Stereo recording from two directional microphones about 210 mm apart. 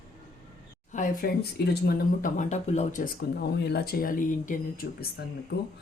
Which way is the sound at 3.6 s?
50° left (ahead or behind).